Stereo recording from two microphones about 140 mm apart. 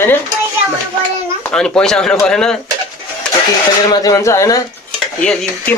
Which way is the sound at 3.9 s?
25° left (ahead or behind).